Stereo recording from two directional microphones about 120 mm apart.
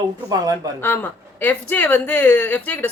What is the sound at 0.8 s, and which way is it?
Speech, 15° left (ahead or behind).